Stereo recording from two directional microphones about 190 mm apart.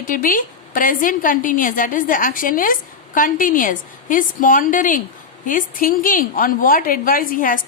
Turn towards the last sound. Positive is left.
turn(degrees=45)  # may be behind; listen again after turning